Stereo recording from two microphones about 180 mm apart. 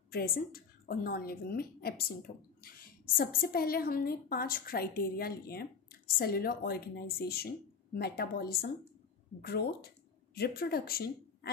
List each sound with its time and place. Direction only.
0.1 s a woman's voice: 55° left (ahead or behind)